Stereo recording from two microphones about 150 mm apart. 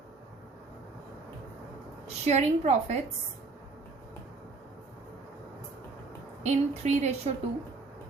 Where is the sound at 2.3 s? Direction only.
45° right (ahead or behind).